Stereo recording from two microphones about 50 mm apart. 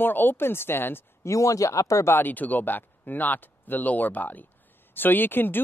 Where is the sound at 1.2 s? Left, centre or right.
Left.